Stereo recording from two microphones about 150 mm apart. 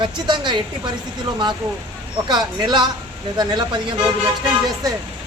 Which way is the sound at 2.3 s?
30° right (ahead or behind).